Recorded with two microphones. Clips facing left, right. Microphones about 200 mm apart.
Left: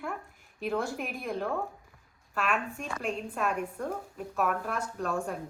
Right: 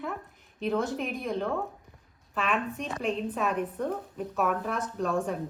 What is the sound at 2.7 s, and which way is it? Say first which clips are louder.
Speech: right 3 dB; 20° right (ahead or behind).